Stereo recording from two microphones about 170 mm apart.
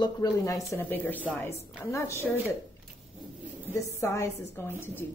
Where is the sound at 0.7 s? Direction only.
10° left (ahead or behind).